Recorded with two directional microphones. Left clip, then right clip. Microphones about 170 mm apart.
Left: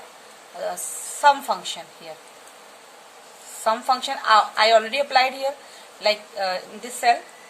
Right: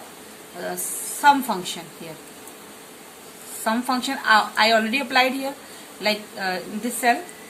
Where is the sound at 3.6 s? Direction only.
55° left (ahead or behind).